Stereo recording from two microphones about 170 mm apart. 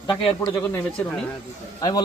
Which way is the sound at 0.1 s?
25° left (ahead or behind).